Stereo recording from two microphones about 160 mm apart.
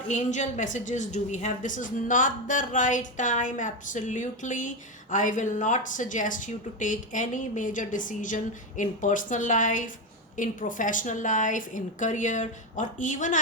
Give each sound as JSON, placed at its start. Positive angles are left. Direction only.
{"t": 0.1, "sound": "speech", "side_deg": 50}